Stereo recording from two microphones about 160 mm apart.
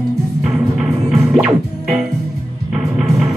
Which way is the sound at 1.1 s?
5° right (ahead or behind).